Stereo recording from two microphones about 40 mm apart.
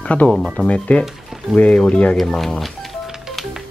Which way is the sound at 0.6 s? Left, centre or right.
Left.